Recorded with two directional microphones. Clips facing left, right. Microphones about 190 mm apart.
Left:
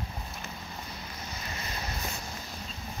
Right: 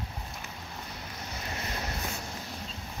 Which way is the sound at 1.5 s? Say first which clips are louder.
Right 4 dB; 65° right (ahead or behind).